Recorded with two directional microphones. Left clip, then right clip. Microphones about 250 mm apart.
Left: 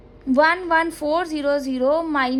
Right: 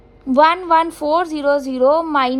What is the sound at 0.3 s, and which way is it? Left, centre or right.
A woman's voice, right.